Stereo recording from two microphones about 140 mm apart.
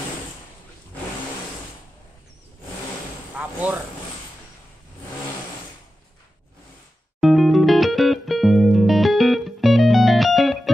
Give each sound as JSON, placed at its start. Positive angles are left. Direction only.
{"t": 3.3, "sound": "speech", "side_deg": -10}
{"t": 7.2, "sound": "music", "side_deg": 0}